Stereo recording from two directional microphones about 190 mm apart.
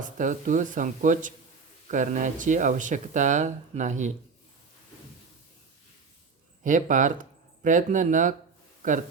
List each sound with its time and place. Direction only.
0.0 s speech: 40° right (ahead or behind)
6.7 s speech: 45° right (ahead or behind)